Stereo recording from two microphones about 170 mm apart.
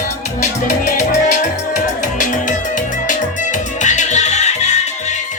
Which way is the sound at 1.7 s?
50° left (ahead or behind).